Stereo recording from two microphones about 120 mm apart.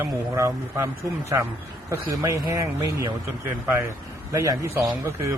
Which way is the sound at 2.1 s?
25° right (ahead or behind).